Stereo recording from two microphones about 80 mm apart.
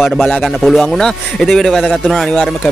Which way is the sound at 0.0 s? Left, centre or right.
Centre.